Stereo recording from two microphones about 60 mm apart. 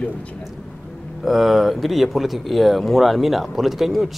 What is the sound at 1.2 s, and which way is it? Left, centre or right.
Speech, centre.